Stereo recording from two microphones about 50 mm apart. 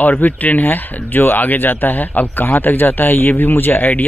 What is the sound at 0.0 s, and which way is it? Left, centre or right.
A man's voice, left.